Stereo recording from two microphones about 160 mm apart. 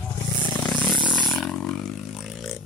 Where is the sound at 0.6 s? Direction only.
5° left (ahead or behind).